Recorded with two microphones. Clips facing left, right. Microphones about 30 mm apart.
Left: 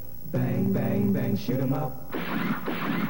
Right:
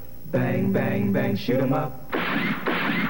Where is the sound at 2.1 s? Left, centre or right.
Right.